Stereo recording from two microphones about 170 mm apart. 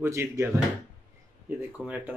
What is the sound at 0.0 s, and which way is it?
Speech, 15° right (ahead or behind).